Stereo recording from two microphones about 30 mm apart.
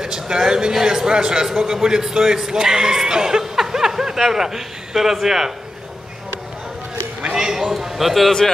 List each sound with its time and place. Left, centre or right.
0.0 s a man's voice: right
3.5 s snicker: centre
4.3 s a man's voice: centre
7.3 s a man's voice: centre